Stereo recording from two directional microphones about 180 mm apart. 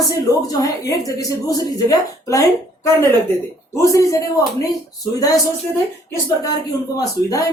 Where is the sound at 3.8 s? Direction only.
15° left (ahead or behind).